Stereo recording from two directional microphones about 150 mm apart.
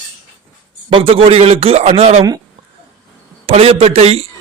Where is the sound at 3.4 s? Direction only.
40° right (ahead or behind).